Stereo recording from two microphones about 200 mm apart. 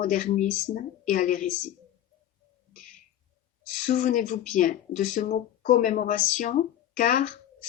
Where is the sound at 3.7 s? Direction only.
40° left (ahead or behind).